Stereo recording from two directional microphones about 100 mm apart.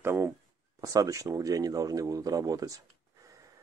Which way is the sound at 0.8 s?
35° right (ahead or behind).